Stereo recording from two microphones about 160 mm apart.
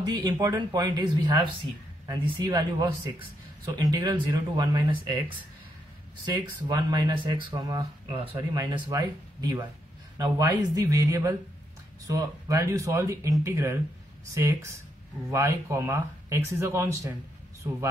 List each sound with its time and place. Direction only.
0.0 s speech: 25° right (ahead or behind)
6.2 s speech: 25° right (ahead or behind)
12.4 s speech: 20° right (ahead or behind)